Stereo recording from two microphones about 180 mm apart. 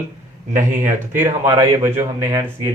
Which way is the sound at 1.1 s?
15° right (ahead or behind).